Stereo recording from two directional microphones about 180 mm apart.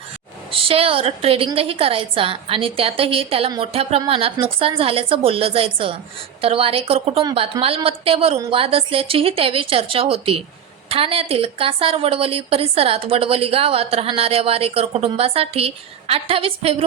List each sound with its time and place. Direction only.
0.5 s a woman's voice: 30° right (ahead or behind)